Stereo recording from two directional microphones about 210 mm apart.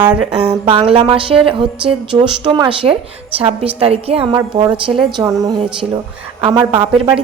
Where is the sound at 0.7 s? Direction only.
25° right (ahead or behind).